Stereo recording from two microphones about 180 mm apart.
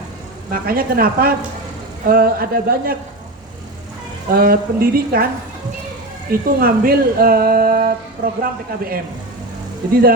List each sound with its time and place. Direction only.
0.5 s speech: 55° right (ahead or behind)
4.4 s speech: 55° right (ahead or behind)
6.3 s speech: 55° right (ahead or behind)